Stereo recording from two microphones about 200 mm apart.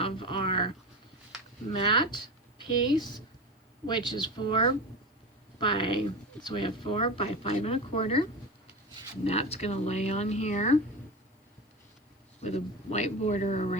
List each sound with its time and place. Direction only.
0.0 s a sound: 25° left (ahead or behind)
1.7 s a woman's voice: 25° left (ahead or behind)
12.4 s speech: 35° left (ahead or behind)